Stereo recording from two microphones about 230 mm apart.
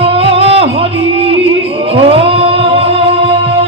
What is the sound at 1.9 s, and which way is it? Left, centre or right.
Music, right.